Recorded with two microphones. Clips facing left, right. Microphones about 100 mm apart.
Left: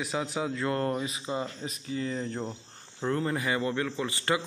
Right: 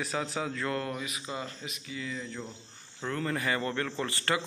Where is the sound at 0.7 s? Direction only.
30° left (ahead or behind).